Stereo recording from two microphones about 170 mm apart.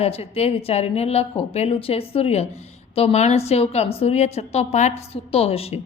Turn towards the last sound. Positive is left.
turn(degrees=35)  # may be behind; listen again after turning